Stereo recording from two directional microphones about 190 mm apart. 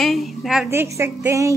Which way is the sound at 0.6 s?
15° right (ahead or behind).